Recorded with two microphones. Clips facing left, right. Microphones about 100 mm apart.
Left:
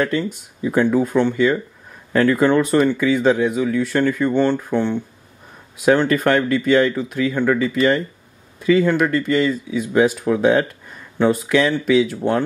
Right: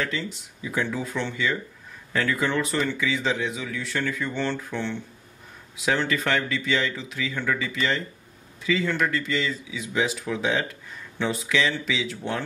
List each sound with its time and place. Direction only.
0.0 s speech: 50° left (ahead or behind)